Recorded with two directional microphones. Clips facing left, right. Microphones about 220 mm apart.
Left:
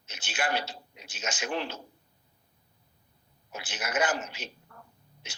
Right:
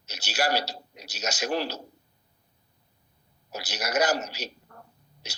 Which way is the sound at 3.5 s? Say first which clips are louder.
Right 4 dB; 40° right (ahead or behind).